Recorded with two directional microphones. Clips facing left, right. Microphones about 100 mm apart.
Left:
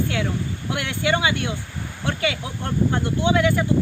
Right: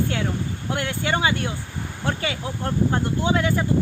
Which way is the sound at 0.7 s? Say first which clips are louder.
Left 2 dB; 35° right (ahead or behind).